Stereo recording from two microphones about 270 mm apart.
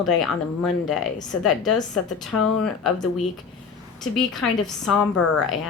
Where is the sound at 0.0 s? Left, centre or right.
Centre.